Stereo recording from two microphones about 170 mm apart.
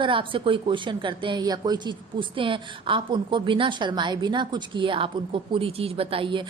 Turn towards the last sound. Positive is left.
turn(degrees=-30)  # may be behind; listen again after turning